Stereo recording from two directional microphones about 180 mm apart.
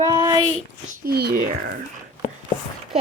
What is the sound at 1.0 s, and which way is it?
Speech, 60° right (ahead or behind).